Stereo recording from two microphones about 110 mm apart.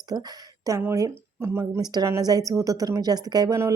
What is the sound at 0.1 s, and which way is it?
Speech, 35° right (ahead or behind).